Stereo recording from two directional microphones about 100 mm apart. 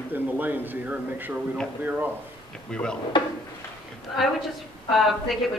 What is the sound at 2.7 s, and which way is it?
Speech, 10° left (ahead or behind).